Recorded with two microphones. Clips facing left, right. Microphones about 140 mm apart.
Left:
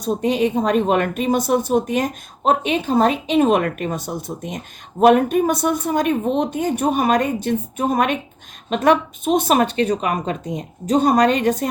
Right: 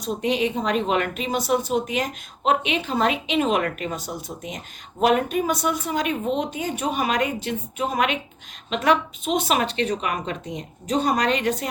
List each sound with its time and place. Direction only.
0.0 s speech: 45° left (ahead or behind)